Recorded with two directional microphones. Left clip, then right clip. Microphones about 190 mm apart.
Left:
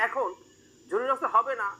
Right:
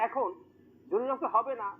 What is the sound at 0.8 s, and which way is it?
Speech, 15° left (ahead or behind).